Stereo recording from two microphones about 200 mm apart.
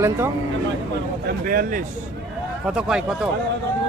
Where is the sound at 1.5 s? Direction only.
45° right (ahead or behind).